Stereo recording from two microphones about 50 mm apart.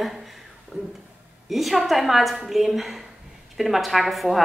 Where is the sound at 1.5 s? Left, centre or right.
Centre.